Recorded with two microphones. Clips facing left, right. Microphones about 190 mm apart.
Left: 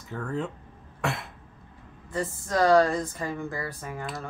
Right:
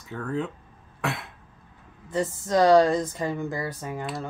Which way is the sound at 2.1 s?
20° right (ahead or behind).